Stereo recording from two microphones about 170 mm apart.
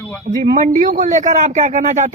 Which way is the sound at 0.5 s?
50° right (ahead or behind).